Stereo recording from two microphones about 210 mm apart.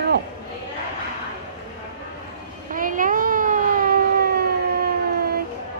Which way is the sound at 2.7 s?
40° right (ahead or behind).